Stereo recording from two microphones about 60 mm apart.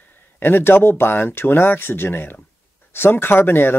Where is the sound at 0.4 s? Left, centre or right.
Left.